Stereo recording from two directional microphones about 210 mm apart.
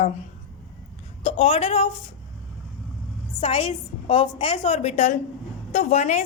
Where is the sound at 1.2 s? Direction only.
30° left (ahead or behind).